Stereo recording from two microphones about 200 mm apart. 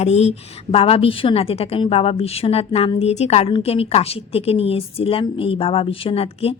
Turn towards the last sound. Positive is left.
turn(degrees=30)  # may be behind; listen again after turning